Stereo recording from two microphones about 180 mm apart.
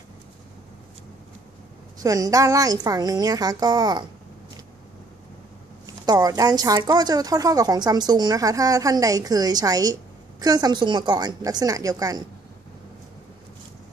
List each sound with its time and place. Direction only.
2.0 s a woman's voice: 20° right (ahead or behind)
6.0 s a woman's voice: 20° right (ahead or behind)